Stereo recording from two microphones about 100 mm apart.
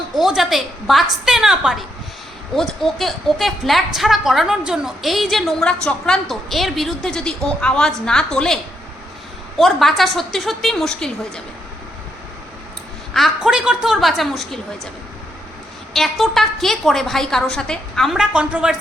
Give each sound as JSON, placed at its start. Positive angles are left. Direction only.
{"t": 0.2, "sound": "a woman's voice", "side_deg": -5}
{"t": 9.6, "sound": "a woman's voice", "side_deg": 0}
{"t": 13.1, "sound": "a woman's voice", "side_deg": 0}
{"t": 15.9, "sound": "a woman's voice", "side_deg": 0}